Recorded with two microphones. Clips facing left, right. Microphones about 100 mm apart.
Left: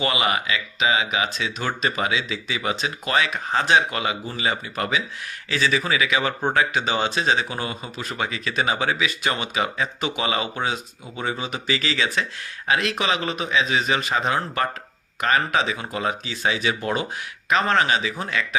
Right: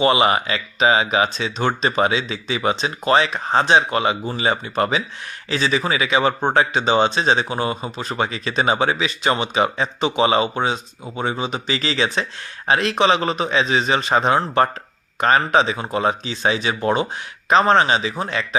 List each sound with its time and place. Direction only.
0.0 s speech: 30° right (ahead or behind)